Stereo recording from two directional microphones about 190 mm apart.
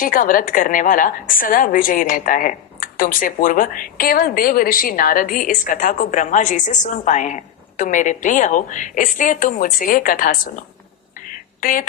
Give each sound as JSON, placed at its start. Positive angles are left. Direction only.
{"t": 0.0, "sound": "a woman's voice", "side_deg": 45}
{"t": 11.6, "sound": "a woman's voice", "side_deg": 45}